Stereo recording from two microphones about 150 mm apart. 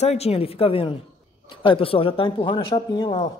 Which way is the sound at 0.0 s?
45° left (ahead or behind).